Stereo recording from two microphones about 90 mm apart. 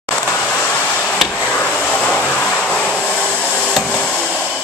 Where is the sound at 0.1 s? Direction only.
15° left (ahead or behind).